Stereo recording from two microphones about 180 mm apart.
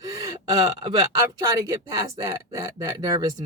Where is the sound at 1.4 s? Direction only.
20° right (ahead or behind).